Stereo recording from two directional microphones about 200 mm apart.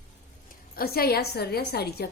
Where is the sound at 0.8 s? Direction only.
50° left (ahead or behind).